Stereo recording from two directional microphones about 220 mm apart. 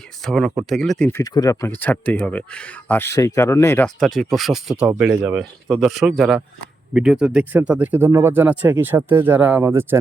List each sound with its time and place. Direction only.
0.2 s speech: centre (ahead or behind)
1.2 s speech: 15° left (ahead or behind); by 10.0 s 10° right (ahead or behind)